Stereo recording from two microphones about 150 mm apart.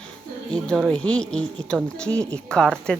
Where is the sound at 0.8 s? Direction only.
10° left (ahead or behind).